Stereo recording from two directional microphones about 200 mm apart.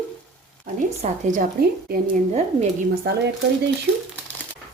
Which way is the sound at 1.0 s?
40° right (ahead or behind).